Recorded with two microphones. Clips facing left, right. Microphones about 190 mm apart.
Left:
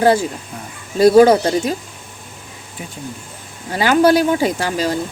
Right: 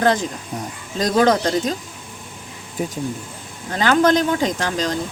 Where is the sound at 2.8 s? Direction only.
40° right (ahead or behind).